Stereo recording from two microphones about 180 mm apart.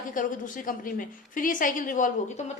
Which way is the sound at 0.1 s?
50° left (ahead or behind).